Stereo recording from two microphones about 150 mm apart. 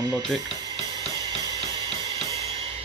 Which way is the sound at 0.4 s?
25° right (ahead or behind).